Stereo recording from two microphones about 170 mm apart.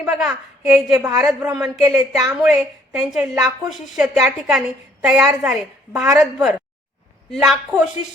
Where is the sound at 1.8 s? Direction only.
20° right (ahead or behind).